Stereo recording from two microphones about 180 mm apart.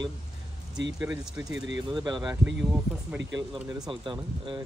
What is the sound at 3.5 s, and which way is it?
Speech, 5° right (ahead or behind).